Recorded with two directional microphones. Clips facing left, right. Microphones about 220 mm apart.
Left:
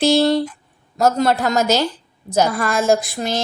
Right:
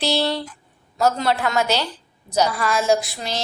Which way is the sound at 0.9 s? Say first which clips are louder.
Left 4 dB; 45° left (ahead or behind).